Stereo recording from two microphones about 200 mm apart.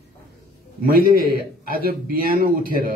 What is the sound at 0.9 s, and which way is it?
A man's voice, 50° right (ahead or behind).